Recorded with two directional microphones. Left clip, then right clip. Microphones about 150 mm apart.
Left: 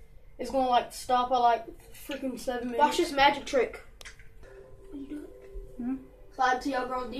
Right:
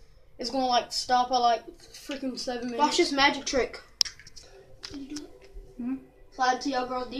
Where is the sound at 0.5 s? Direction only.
15° right (ahead or behind).